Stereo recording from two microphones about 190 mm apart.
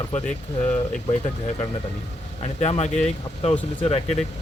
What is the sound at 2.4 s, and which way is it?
Speech, 35° left (ahead or behind).